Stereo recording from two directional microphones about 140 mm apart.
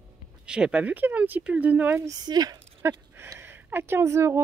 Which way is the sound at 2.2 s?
30° right (ahead or behind).